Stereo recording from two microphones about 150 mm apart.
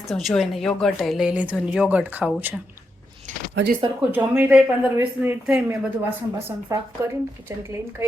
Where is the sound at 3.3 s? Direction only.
55° right (ahead or behind).